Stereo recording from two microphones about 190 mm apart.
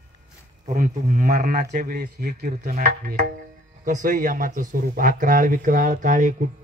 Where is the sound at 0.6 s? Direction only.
45° right (ahead or behind).